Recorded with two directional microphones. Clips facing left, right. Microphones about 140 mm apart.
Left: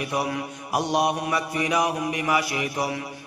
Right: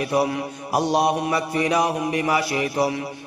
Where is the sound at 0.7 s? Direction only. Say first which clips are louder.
Right 3 dB; 30° right (ahead or behind).